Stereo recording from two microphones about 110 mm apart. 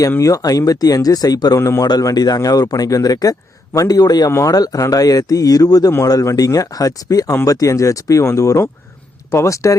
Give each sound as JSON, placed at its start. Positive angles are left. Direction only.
{"t": 0.2, "sound": "speech", "side_deg": 30}